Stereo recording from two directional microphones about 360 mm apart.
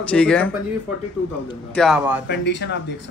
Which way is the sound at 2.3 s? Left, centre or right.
Left.